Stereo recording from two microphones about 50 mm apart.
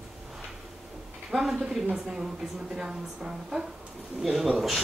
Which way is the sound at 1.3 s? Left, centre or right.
Centre.